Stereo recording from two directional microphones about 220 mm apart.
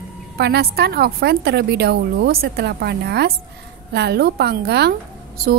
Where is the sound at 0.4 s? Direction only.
45° right (ahead or behind).